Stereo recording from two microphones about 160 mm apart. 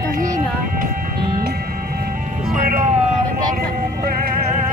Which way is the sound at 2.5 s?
60° right (ahead or behind).